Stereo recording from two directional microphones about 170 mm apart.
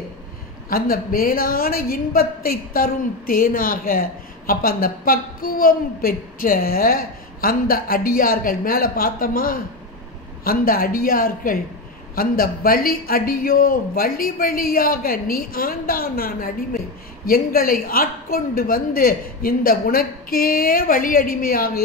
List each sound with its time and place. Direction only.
0.7 s a woman's voice: 60° left (ahead or behind)